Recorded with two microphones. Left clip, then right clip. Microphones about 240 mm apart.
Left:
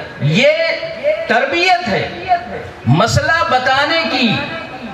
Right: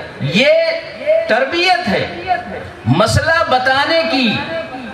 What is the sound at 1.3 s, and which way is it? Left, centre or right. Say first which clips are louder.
Speech: even; right.